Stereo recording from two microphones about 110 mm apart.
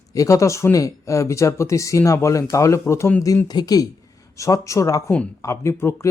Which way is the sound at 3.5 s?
35° left (ahead or behind).